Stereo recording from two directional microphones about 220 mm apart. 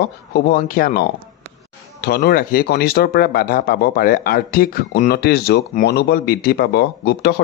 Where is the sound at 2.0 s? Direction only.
45° left (ahead or behind).